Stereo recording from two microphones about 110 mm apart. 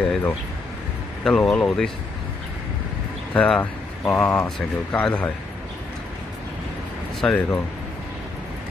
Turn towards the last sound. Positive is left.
turn(degrees=5)  # may be behind; listen again after turning